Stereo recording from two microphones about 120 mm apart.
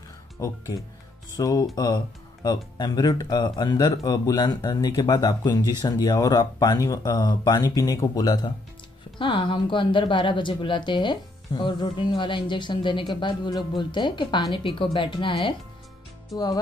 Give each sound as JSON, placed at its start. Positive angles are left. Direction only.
{"t": 1.3, "sound": "a woman's voice", "side_deg": 30}